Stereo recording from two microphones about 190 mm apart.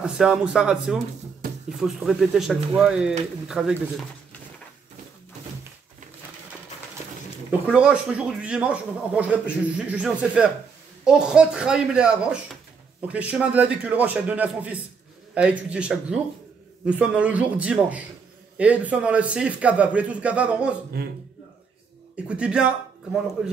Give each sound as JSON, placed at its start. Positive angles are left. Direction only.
{"t": 0.0, "sound": "speech", "side_deg": -5}
{"t": 7.6, "sound": "a man's voice", "side_deg": -5}
{"t": 21.0, "sound": "a man's voice", "side_deg": -55}
{"t": 22.1, "sound": "speech", "side_deg": -5}